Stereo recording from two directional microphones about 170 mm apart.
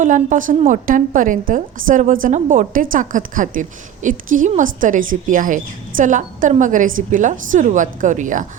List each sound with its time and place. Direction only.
0.0 s a woman's voice: 50° right (ahead or behind)